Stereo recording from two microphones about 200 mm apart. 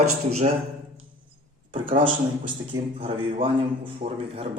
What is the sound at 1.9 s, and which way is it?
A man's voice, 25° right (ahead or behind).